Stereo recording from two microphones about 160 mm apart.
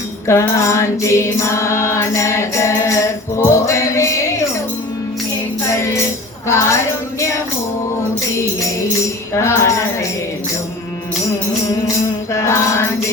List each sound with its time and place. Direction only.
0.3 s music: 20° left (ahead or behind)
6.5 s music: 15° left (ahead or behind)
9.3 s music: 15° left (ahead or behind)
12.3 s music: 15° left (ahead or behind)